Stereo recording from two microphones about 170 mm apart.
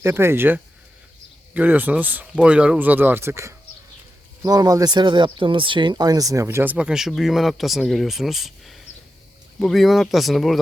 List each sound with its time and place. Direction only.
0.0 s speech: 15° right (ahead or behind)